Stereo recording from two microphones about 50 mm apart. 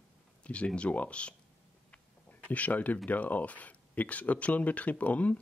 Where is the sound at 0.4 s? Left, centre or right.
Left.